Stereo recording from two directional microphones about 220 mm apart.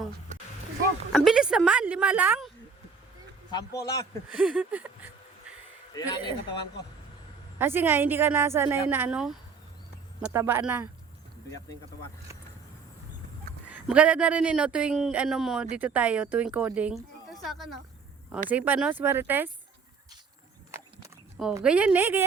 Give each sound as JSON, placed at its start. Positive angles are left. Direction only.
{"t": 1.1, "sound": "speech", "side_deg": 0}
{"t": 3.8, "sound": "speech", "side_deg": 15}
{"t": 4.4, "sound": "a woman's voice", "side_deg": -5}
{"t": 5.9, "sound": "speech", "side_deg": 15}
{"t": 7.6, "sound": "a woman's voice", "side_deg": -10}
{"t": 13.7, "sound": "a woman's voice", "side_deg": -5}
{"t": 21.5, "sound": "a woman's voice", "side_deg": -5}